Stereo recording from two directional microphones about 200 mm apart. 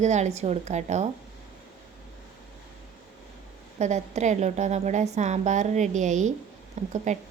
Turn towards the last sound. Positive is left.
turn(degrees=-35)  # may be behind; listen again after turning